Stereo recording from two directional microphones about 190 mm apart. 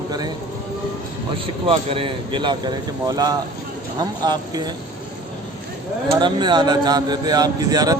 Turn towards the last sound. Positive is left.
turn(degrees=-20)  # may be behind; listen again after turning